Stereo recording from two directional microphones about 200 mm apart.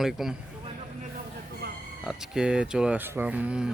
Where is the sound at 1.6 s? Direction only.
55° right (ahead or behind).